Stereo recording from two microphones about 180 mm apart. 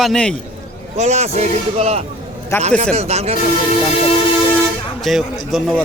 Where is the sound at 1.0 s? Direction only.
35° right (ahead or behind).